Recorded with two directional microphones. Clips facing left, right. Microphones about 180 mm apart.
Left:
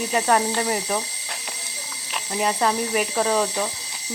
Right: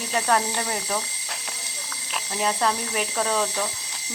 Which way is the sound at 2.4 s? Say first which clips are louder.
Left 3 dB; 5° left (ahead or behind).